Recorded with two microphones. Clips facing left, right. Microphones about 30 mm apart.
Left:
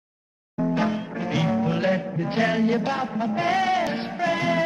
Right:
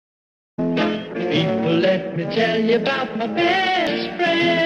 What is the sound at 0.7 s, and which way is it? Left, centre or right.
Music, right.